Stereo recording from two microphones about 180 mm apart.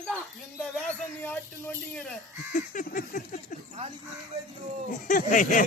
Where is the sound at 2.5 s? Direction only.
45° left (ahead or behind).